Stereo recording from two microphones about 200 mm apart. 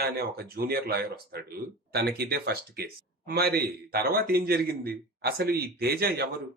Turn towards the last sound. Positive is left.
turn(degrees=-50)  # may be behind; listen again after turning